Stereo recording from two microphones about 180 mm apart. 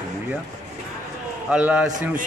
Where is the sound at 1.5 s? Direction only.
5° right (ahead or behind).